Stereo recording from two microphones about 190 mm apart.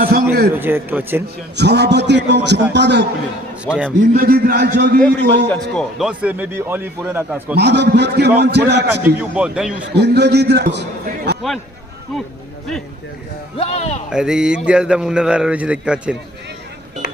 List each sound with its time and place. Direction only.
0.0 s a man's voice: 55° right (ahead or behind)
0.5 s a man's voice: 10° right (ahead or behind)
1.5 s a man's voice: 60° right (ahead or behind)
3.7 s a man's voice: 5° left (ahead or behind)
4.1 s a man's voice: 50° right (ahead or behind)
5.7 s a man's voice: 5° right (ahead or behind)
7.5 s a man's voice: 65° right (ahead or behind)
8.9 s a man's voice: 5° right (ahead or behind)
9.9 s a man's voice: 60° right (ahead or behind)
13.6 s a man's voice: 35° left (ahead or behind)
14.1 s a man's voice: 5° right (ahead or behind)